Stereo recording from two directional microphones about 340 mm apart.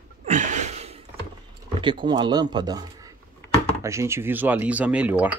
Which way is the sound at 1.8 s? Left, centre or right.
Centre.